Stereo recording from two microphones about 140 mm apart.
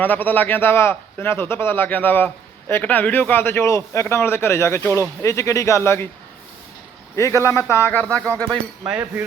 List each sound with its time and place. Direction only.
0.0 s a man's voice: 15° left (ahead or behind)
7.2 s a man's voice: 20° left (ahead or behind)
8.8 s a sound: 15° right (ahead or behind)